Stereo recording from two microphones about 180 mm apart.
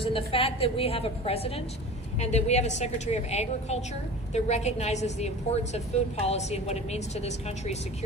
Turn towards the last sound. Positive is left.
turn(degrees=35)  # may be behind; listen again after turning